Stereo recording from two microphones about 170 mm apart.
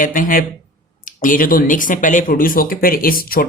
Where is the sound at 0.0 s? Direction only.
55° left (ahead or behind).